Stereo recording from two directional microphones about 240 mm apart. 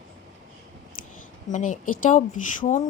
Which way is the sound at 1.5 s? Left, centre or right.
Left.